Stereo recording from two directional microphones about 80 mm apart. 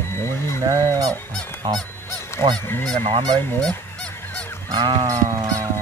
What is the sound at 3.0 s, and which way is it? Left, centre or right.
Goose, right.